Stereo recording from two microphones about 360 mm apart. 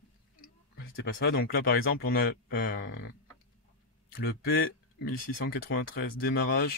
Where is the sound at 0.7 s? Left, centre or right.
Left.